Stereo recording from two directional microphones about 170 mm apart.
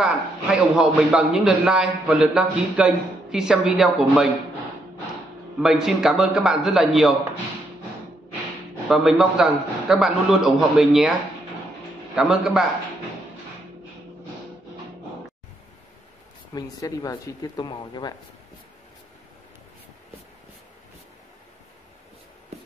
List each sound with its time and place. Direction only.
0.0 s a man's voice: 5° right (ahead or behind)
5.6 s a man's voice: centre (ahead or behind)
8.8 s a man's voice: 5° right (ahead or behind)
12.2 s a man's voice: 5° right (ahead or behind)
16.5 s speech: 20° left (ahead or behind)